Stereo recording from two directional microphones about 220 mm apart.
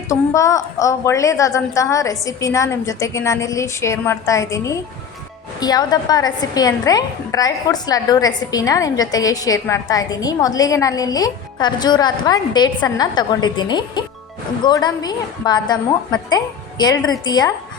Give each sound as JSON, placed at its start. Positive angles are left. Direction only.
{"t": 0.1, "sound": "a woman's voice", "side_deg": 15}